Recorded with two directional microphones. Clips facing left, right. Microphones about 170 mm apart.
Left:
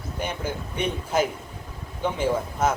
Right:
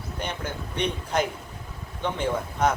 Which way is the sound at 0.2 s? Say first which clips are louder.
Left 3 dB; 5° left (ahead or behind).